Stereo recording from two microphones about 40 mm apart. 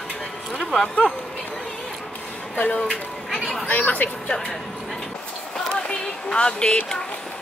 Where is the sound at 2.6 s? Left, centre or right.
Left.